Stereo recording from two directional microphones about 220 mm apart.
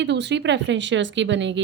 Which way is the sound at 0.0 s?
55° right (ahead or behind).